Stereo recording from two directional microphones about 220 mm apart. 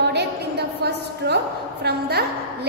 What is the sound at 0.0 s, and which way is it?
A woman's voice, 50° right (ahead or behind).